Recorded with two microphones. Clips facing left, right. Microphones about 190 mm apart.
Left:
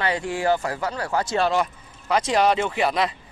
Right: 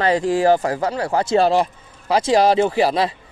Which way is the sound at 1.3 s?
35° right (ahead or behind).